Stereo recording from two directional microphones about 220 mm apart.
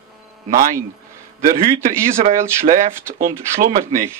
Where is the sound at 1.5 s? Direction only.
40° right (ahead or behind).